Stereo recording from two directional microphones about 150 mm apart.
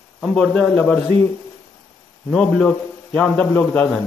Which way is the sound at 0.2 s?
5° left (ahead or behind).